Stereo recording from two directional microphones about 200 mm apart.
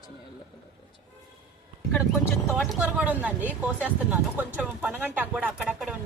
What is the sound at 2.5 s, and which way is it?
Speech, 5° right (ahead or behind).